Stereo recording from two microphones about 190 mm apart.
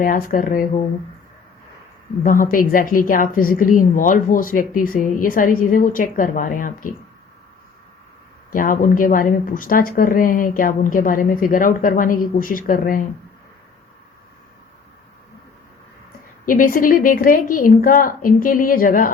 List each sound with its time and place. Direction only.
0.0 s a woman's voice: 45° left (ahead or behind)
2.2 s a woman's voice: 45° left (ahead or behind)
8.5 s a woman's voice: 45° left (ahead or behind)
16.5 s a woman's voice: 45° left (ahead or behind)